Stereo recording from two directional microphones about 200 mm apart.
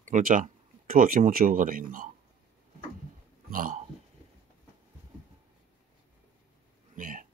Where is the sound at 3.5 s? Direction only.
45° right (ahead or behind).